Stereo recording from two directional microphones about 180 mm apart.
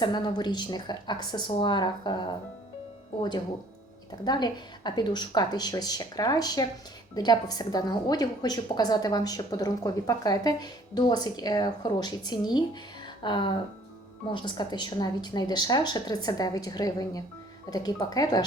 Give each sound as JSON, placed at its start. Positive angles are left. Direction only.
{"t": 0.0, "sound": "a woman's voice", "side_deg": 25}
{"t": 4.2, "sound": "a woman's voice", "side_deg": 25}